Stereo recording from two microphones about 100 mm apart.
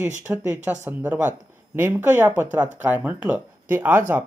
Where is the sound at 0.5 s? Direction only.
15° right (ahead or behind).